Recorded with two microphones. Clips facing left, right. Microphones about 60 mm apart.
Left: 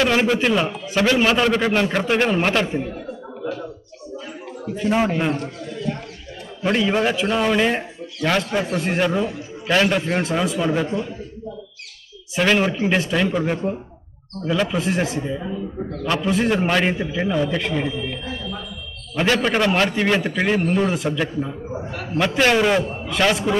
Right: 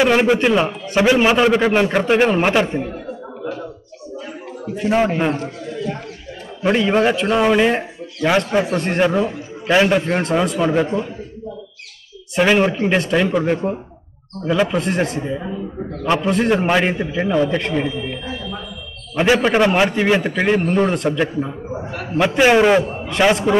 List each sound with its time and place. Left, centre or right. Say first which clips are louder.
0.0 s a man's voice: right 4 dB; centre
4.8 s a man's voice: right 3 dB; centre
5.2 s a man's voice: right 3 dB; centre
12.4 s a man's voice: right 3 dB; centre
14.8 s a man's voice: right 2 dB; centre
15.3 s a man's voice: right 1 dB; centre
16.2 s a man's voice: right 1 dB; centre
21.2 s a man's voice: right 3 dB; centre
22.4 s a man's voice: right 5 dB; centre
22.8 s a man's voice: right 3 dB; centre